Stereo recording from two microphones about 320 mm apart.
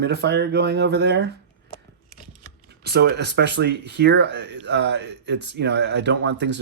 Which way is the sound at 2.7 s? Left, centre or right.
Right.